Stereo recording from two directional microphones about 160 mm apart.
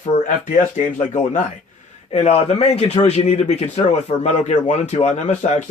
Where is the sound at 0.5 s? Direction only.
50° left (ahead or behind).